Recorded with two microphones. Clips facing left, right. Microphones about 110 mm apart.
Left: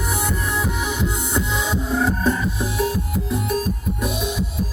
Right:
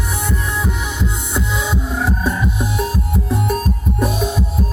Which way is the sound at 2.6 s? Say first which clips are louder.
Right 1 dB; 30° right (ahead or behind).